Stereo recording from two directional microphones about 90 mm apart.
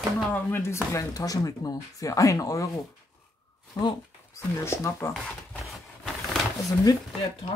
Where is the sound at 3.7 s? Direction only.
45° left (ahead or behind).